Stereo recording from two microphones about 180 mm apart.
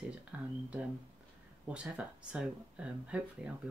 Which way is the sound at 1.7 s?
5° right (ahead or behind).